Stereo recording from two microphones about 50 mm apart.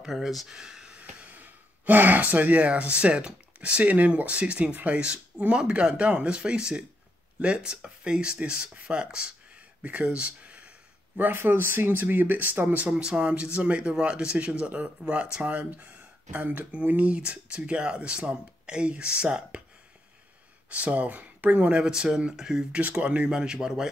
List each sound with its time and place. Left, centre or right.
0.0 s speech: centre
0.9 s speech: right
11.1 s speech: right
20.7 s speech: right
21.8 s speech: centre
22.8 s speech: right